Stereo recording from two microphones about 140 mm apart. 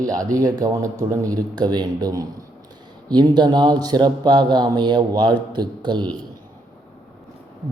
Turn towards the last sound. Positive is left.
turn(degrees=-30)  # may be behind; listen again after turning